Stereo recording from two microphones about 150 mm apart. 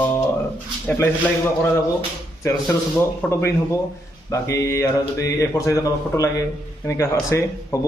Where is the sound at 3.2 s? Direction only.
15° left (ahead or behind).